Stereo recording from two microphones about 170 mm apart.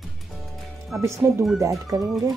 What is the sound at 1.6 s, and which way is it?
Speech, 20° right (ahead or behind).